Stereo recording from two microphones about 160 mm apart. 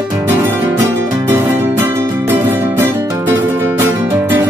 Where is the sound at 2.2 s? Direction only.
15° right (ahead or behind).